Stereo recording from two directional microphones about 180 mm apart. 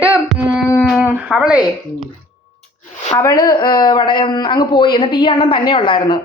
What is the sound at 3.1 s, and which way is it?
Speech, 20° left (ahead or behind).